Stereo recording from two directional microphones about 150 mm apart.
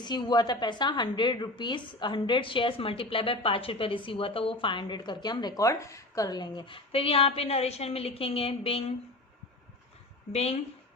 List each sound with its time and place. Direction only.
0.0 s a woman's voice: 30° left (ahead or behind)
10.3 s a woman's voice: 45° left (ahead or behind)